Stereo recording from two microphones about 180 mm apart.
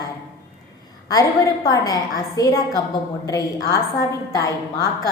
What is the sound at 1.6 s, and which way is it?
A woman's voice, 20° left (ahead or behind).